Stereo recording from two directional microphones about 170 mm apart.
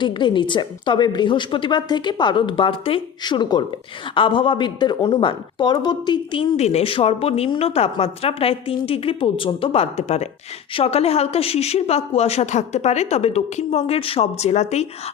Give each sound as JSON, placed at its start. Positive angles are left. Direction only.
{"t": 0.0, "sound": "a woman's voice", "side_deg": 25}